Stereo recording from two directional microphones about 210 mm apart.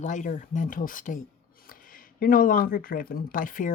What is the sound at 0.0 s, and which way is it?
Speech, 35° left (ahead or behind).